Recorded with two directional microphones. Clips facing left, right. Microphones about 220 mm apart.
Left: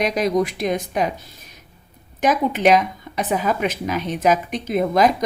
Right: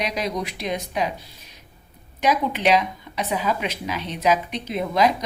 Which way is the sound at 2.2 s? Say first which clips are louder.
Left 3 dB; 50° left (ahead or behind).